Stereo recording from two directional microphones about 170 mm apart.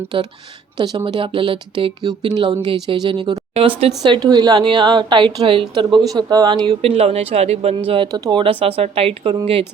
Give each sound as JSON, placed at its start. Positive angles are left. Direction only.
{"t": 0.8, "sound": "speech", "side_deg": -25}
{"t": 6.9, "sound": "speech", "side_deg": -35}